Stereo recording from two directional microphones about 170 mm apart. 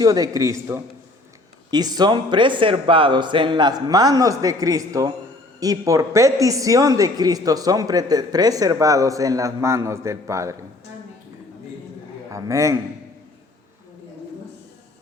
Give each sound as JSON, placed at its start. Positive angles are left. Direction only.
{"t": 0.0, "sound": "a man's voice", "side_deg": -20}
{"t": 12.3, "sound": "speech", "side_deg": -20}